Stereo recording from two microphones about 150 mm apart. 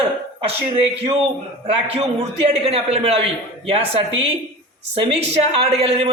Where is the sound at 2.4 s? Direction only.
40° right (ahead or behind).